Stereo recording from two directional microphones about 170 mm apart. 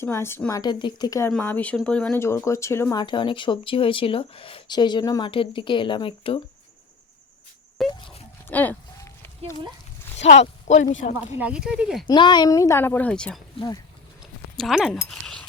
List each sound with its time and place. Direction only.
0.0 s speech: 15° left (ahead or behind)
1.3 s speech: 10° left (ahead or behind)
3.0 s speech: 30° left (ahead or behind)
7.8 s speech: centre (ahead or behind)
8.4 s a sound: 10° left (ahead or behind)
10.2 s speech: 40° left (ahead or behind)
11.3 s speech: 5° right (ahead or behind)
12.0 s speech: 25° left (ahead or behind); by 13.4 s 5° left (ahead or behind)
14.6 s speech: centre (ahead or behind)